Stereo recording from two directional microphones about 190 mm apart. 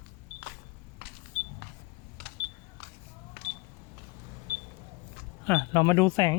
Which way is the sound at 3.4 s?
60° right (ahead or behind).